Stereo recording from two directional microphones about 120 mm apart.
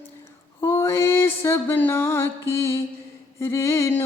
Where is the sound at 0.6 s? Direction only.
20° left (ahead or behind).